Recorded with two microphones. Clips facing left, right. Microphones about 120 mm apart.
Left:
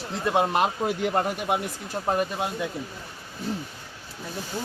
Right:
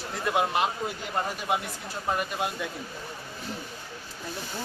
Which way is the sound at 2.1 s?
30° left (ahead or behind).